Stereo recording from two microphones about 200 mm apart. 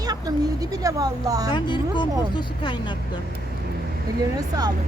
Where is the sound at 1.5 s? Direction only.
25° left (ahead or behind).